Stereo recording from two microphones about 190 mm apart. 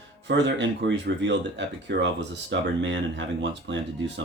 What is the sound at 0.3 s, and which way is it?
Speech, 65° right (ahead or behind).